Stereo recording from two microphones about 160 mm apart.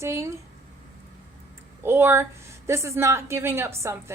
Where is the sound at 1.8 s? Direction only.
15° right (ahead or behind).